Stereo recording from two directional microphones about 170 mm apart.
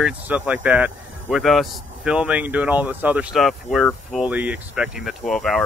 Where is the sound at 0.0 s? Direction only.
10° right (ahead or behind).